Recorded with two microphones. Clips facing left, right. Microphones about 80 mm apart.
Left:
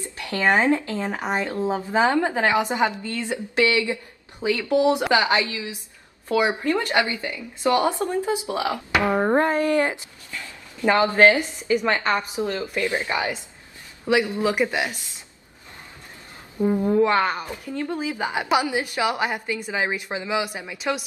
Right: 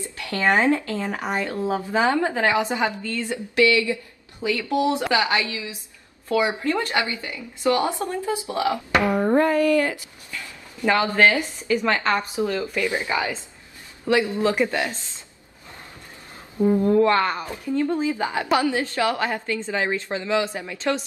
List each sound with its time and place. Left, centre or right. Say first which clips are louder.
0.0 s speech: even; left
16.6 s speech: right 2 dB; centre